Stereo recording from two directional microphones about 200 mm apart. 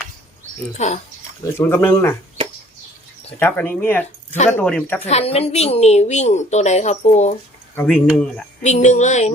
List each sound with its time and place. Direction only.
0.8 s a woman's voice: 35° left (ahead or behind)
1.5 s speech: 10° left (ahead or behind)
3.3 s speech: 10° left (ahead or behind)
5.0 s a woman's voice: 30° left (ahead or behind)
7.8 s speech: 5° left (ahead or behind)
8.6 s a woman's voice: 35° left (ahead or behind)